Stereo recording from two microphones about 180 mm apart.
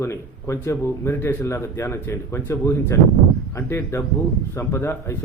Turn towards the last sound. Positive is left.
turn(degrees=15)  # may be behind; listen again after turning